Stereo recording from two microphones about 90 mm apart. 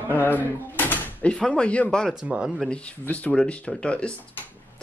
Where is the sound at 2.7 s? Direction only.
15° left (ahead or behind).